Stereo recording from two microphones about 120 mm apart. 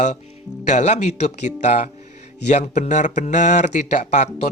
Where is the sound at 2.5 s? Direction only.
75° left (ahead or behind).